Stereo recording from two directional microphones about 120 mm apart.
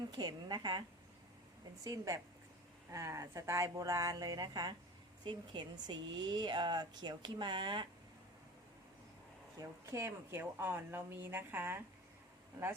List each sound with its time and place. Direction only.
0.2 s speech: 35° right (ahead or behind)
9.6 s a woman's voice: 25° right (ahead or behind)